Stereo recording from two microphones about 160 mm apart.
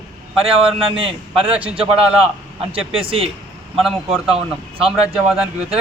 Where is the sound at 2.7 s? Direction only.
35° right (ahead or behind).